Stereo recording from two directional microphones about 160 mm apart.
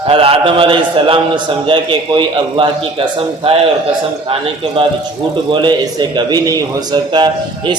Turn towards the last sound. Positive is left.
turn(degrees=-30)  # may be behind; listen again after turning